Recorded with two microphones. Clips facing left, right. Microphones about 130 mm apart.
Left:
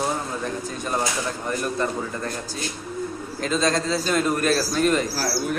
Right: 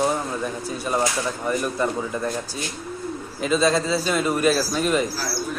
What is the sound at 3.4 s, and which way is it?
Speech, 5° right (ahead or behind).